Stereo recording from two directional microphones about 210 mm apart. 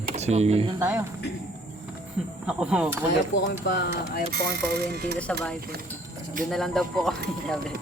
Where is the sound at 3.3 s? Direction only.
55° left (ahead or behind).